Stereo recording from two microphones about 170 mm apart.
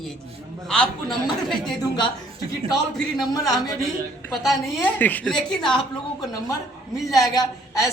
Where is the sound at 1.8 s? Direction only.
25° left (ahead or behind).